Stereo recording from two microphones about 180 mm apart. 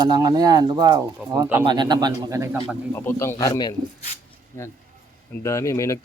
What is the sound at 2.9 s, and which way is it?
Speech, 15° left (ahead or behind).